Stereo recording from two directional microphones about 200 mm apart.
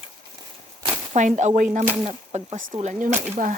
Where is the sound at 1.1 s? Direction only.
35° right (ahead or behind).